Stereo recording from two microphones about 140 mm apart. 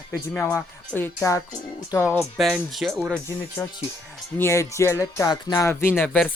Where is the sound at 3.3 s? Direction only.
20° left (ahead or behind).